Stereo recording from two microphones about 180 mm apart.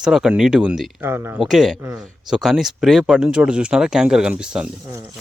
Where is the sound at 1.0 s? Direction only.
15° right (ahead or behind).